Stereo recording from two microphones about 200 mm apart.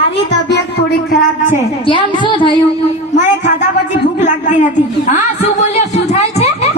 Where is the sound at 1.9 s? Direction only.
25° left (ahead or behind).